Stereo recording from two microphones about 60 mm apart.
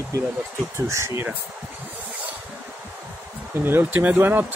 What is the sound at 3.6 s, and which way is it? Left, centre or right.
Speech, right.